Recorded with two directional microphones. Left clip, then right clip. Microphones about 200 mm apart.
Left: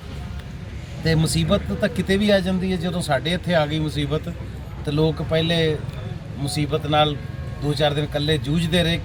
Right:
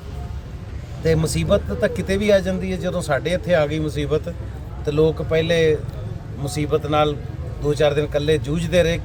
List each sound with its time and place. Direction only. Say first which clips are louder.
1.0 s speech: right 3 dB; 10° right (ahead or behind)